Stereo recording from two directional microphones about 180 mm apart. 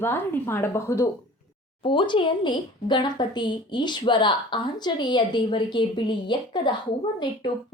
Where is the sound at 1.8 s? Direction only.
25° left (ahead or behind).